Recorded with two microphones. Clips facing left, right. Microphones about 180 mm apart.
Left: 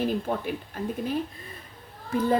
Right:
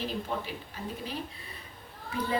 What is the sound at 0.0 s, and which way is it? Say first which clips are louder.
A woman's voice: left 7 dB; 50° left (ahead or behind).